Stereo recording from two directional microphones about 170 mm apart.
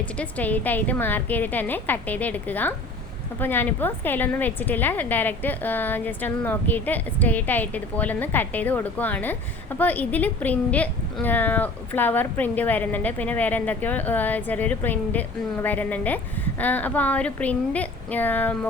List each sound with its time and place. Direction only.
0.0 s a woman's voice: 10° left (ahead or behind)